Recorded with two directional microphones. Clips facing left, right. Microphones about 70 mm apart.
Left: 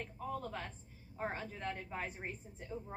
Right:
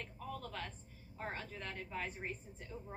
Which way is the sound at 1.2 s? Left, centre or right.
Centre.